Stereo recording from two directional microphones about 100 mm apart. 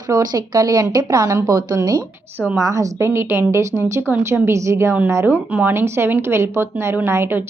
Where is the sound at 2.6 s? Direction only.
35° right (ahead or behind).